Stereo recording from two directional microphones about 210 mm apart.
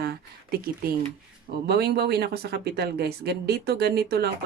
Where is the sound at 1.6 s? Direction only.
50° right (ahead or behind).